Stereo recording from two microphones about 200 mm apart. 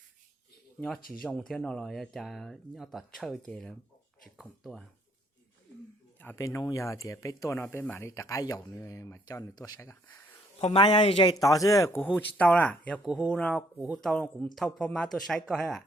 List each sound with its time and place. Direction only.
1.2 s speech: 5° left (ahead or behind)
6.1 s speech: 10° left (ahead or behind)
10.6 s a man's voice: 30° left (ahead or behind); by 15.8 s centre (ahead or behind)